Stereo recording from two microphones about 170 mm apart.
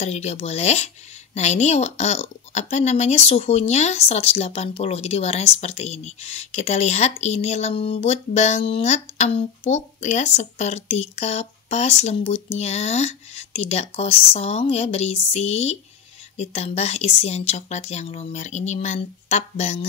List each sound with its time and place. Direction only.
0.0 s speech: 40° left (ahead or behind)